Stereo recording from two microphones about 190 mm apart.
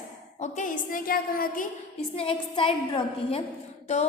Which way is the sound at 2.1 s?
30° left (ahead or behind).